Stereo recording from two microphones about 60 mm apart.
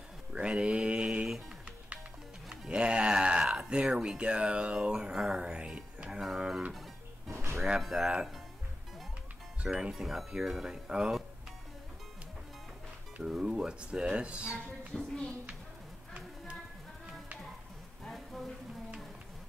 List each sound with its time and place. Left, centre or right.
0.3 s mantra: centre
2.7 s a sound: centre
7.2 s music: right
7.8 s speech: centre
9.7 s speech: centre
13.2 s speech: centre
15.0 s speech: centre